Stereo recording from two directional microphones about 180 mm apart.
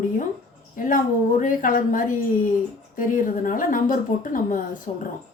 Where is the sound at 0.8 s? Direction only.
50° left (ahead or behind).